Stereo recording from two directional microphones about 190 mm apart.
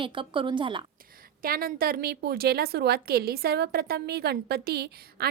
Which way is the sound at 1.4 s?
50° right (ahead or behind).